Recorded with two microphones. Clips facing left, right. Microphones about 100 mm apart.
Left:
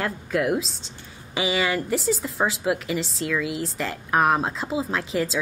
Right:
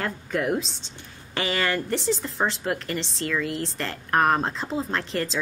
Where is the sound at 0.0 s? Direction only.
Centre (ahead or behind).